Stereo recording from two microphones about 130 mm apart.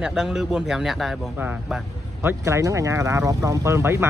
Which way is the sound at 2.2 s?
20° right (ahead or behind).